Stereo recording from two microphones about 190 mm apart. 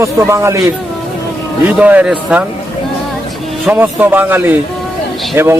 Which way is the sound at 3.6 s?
10° right (ahead or behind).